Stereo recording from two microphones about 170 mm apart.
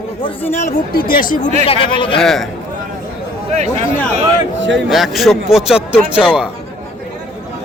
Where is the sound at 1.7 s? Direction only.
30° left (ahead or behind).